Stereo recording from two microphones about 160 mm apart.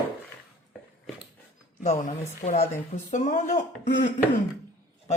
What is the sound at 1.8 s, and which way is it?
Speech, 45° left (ahead or behind).